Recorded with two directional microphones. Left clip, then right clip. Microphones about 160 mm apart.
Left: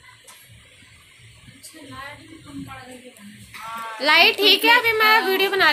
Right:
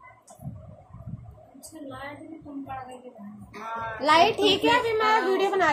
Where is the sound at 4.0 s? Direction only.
Centre (ahead or behind).